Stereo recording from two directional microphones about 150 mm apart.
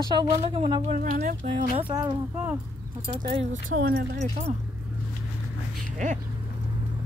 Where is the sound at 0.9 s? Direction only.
55° right (ahead or behind).